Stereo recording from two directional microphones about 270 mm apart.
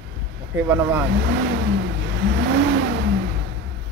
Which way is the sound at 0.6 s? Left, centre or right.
Centre.